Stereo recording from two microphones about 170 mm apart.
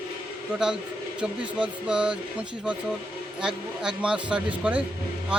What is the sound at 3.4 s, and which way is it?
Speech, 5° right (ahead or behind).